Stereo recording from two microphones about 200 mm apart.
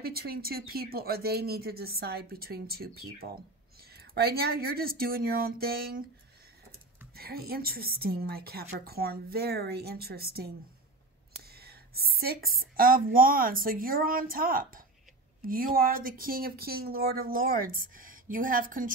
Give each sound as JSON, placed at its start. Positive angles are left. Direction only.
{"t": 0.0, "sound": "speech", "side_deg": -50}
{"t": 7.2, "sound": "speech", "side_deg": -50}